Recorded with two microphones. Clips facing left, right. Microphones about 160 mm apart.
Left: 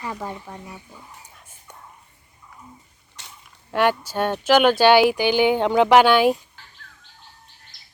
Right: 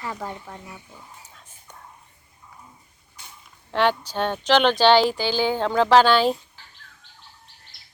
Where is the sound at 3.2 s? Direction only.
80° left.